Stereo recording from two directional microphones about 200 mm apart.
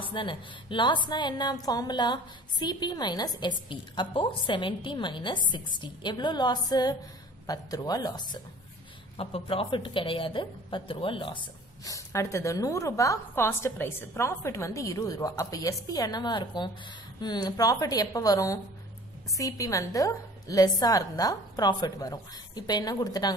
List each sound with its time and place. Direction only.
0.0 s a woman's voice: 25° left (ahead or behind)
11.8 s a woman's voice: 15° left (ahead or behind)